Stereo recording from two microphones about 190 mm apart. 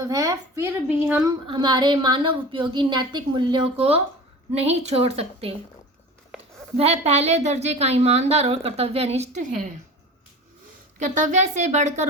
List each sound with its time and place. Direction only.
0.0 s a woman's voice: 20° right (ahead or behind)
1.5 s a woman's voice: 25° right (ahead or behind)
6.7 s a woman's voice: 30° right (ahead or behind)
11.1 s a woman's voice: 40° right (ahead or behind)